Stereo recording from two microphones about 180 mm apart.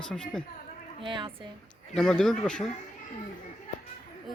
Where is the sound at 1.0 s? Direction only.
25° right (ahead or behind).